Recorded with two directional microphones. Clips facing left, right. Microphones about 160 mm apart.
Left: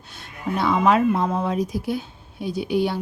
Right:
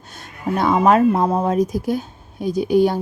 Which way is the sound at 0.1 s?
45° right (ahead or behind).